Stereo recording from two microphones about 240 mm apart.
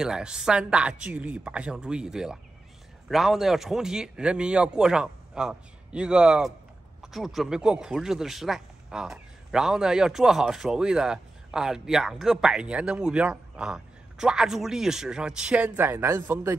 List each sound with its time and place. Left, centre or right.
0.0 s a man's voice: centre